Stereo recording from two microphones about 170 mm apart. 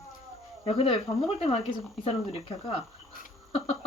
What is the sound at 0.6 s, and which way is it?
Speech, 35° left (ahead or behind).